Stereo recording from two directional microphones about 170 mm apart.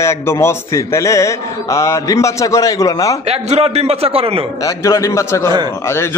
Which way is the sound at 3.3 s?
40° right (ahead or behind).